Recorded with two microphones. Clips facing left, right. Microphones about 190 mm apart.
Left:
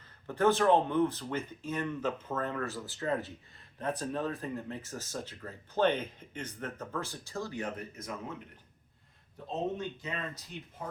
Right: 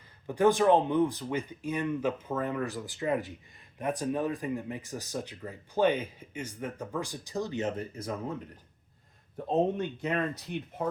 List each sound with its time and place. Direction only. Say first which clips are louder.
0.3 s speech: right 3 dB; 15° right (ahead or behind); by 8.1 s 30° right (ahead or behind)
9.5 s speech: right 7 dB; 60° right (ahead or behind)